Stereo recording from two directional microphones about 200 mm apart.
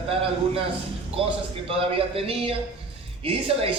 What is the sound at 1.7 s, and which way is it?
A man's voice, 30° right (ahead or behind).